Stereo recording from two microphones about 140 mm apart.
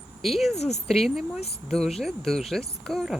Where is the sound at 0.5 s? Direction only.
50° left (ahead or behind).